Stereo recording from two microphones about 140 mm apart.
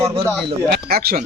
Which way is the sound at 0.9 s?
90° right.